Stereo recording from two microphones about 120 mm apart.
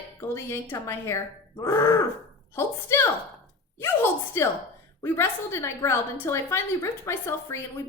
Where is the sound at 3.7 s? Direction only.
20° left (ahead or behind).